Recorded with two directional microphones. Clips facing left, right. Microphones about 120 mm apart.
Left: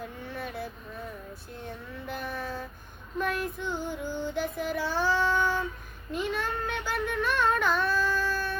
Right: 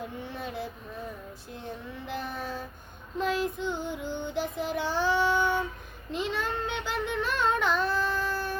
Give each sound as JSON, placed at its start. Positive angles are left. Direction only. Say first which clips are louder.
{"t": 0.3, "sound": "child singing", "louder": "even", "side_deg": -20}
{"t": 2.0, "sound": "child singing", "louder": "even", "side_deg": -20}